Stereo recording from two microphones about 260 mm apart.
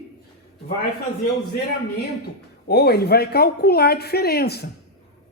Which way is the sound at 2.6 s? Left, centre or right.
Left.